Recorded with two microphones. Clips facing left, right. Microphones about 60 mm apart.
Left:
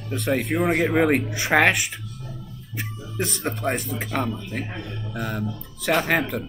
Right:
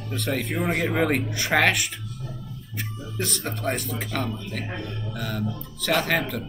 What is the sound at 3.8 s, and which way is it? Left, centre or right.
Speech, centre.